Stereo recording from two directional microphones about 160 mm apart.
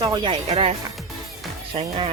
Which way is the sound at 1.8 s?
35° right (ahead or behind).